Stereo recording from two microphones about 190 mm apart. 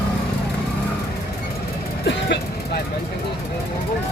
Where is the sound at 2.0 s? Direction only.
65° left (ahead or behind).